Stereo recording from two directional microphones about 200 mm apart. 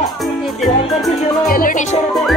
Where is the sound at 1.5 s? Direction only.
45° left (ahead or behind).